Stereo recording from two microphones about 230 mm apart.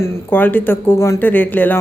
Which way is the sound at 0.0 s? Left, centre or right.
Centre.